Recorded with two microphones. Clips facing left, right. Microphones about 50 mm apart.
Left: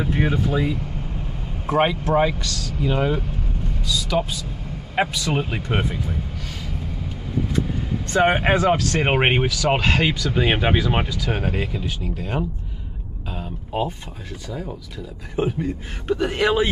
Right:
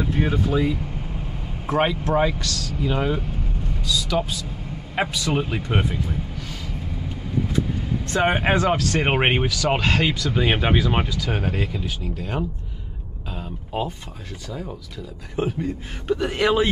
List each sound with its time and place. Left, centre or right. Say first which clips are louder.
0.0 s speech: left 1 dB; centre
0.3 s speech: even; centre
8.1 s speech: left 2 dB; centre
13.3 s a sound: left 2 dB; centre
14.5 s speech: left 1 dB; centre